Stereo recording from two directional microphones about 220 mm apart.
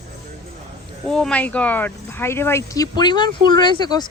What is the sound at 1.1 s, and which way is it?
Speech, 5° left (ahead or behind).